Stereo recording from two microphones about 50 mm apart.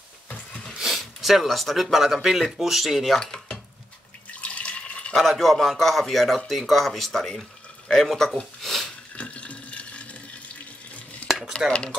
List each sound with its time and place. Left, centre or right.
0.7 s speech: centre
3.2 s dishes: centre
4.4 s water: left
5.1 s speech: centre
8.6 s a sound: centre
9.1 s water: left
11.5 s cutlery: centre